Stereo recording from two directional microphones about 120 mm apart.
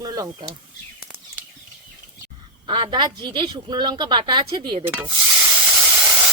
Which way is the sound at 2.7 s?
40° right (ahead or behind).